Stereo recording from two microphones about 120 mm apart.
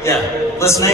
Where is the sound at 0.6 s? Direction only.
25° left (ahead or behind).